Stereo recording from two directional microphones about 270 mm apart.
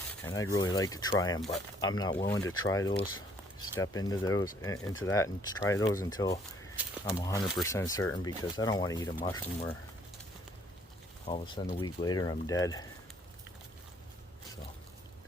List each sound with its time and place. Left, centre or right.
0.3 s speech: centre
1.4 s speech: centre
1.8 s speech: centre
11.3 s speech: centre